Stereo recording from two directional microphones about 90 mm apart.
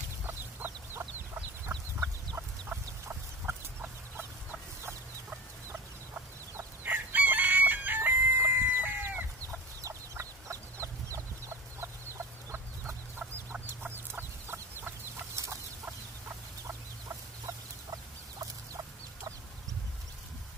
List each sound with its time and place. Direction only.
0.3 s chicken: 20° right (ahead or behind)
9.5 s chicken: 35° right (ahead or behind)